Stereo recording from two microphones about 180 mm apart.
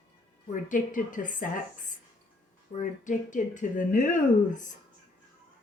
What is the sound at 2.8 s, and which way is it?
Speech, 45° left (ahead or behind).